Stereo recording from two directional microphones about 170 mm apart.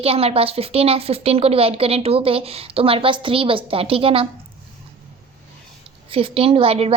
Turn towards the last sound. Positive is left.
turn(degrees=-35)  # may be behind; listen again after turning